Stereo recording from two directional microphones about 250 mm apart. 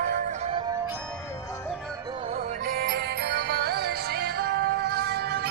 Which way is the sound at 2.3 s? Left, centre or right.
Right.